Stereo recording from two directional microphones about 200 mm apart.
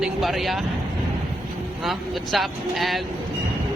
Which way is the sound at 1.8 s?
Centre (ahead or behind).